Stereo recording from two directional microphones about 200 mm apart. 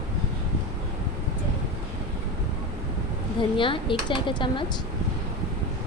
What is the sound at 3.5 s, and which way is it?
Speech, 25° left (ahead or behind).